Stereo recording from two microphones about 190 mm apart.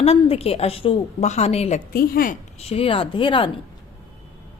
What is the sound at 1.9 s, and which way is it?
Speech, 50° left (ahead or behind).